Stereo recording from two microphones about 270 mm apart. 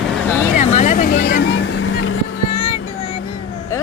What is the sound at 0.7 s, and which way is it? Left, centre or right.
Vehicle, left.